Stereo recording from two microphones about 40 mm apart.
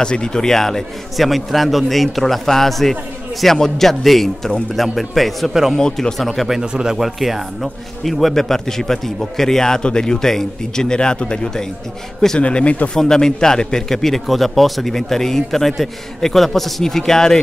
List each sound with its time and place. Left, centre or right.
0.0 s a man's voice: left
1.1 s a man's voice: centre
5.8 s a man's voice: centre
6.1 s a man's voice: centre
6.6 s a man's voice: centre
7.0 s a man's voice: centre; by 12.9 s left
12.9 s a man's voice: centre